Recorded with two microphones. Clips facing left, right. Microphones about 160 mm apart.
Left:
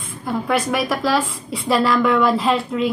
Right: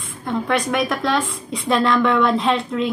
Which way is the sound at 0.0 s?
5° left (ahead or behind).